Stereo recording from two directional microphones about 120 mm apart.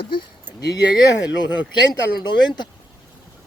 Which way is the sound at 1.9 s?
35° left (ahead or behind).